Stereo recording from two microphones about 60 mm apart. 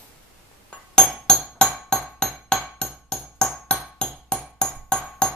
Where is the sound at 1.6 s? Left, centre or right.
Centre.